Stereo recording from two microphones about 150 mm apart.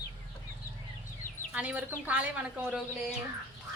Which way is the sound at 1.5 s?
10° right (ahead or behind).